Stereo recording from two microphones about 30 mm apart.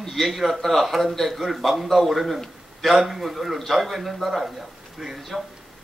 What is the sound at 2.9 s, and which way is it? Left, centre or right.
A man's voice, centre.